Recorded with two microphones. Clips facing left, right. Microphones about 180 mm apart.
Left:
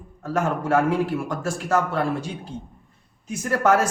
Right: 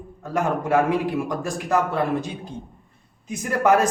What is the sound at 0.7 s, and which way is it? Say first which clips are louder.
A man's voice: even; 15° right (ahead or behind).